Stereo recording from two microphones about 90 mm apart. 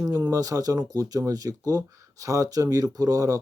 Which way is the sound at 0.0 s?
40° right (ahead or behind).